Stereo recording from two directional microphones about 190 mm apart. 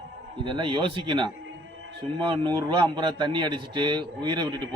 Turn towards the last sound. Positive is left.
turn(degrees=-25)  # may be behind; listen again after turning